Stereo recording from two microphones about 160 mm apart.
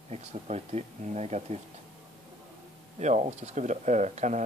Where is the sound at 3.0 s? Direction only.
45° right (ahead or behind).